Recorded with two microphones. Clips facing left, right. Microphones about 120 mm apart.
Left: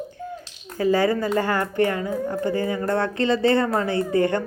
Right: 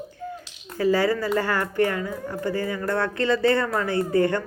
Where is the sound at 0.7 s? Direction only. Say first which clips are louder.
Left 1 dB; 20° left (ahead or behind).